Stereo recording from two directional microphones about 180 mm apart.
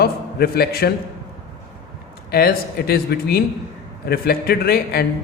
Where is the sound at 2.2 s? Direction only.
60° left (ahead or behind).